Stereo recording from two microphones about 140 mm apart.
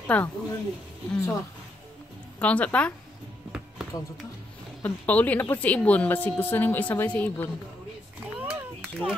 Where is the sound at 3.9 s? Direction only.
25° left (ahead or behind).